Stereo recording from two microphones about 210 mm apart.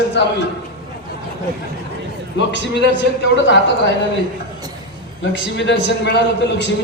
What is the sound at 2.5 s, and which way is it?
A man's voice, 55° left (ahead or behind).